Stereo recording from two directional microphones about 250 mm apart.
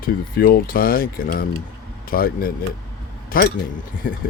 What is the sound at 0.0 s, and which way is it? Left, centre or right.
A man's voice, left.